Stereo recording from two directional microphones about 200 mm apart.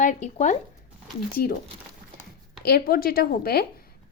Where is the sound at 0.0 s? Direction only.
40° left (ahead or behind).